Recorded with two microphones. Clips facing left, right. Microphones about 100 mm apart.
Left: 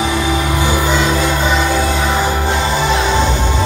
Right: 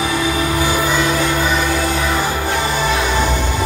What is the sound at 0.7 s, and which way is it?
Music, 25° left (ahead or behind).